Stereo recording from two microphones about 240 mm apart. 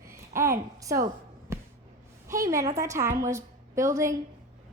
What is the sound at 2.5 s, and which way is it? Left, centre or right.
A woman's voice, centre.